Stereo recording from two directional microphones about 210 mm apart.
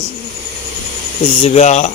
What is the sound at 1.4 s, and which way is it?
Speech, 30° left (ahead or behind).